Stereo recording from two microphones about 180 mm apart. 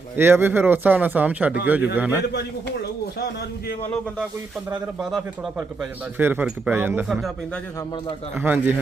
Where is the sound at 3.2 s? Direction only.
60° left (ahead or behind).